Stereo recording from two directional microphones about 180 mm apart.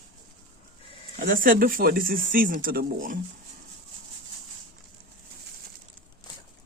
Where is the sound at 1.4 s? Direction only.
50° right (ahead or behind).